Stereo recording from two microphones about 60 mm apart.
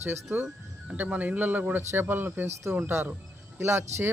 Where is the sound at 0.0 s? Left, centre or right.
Right.